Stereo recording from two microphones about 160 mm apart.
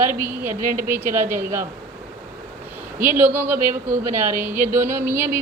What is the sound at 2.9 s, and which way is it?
A woman's voice, 15° right (ahead or behind).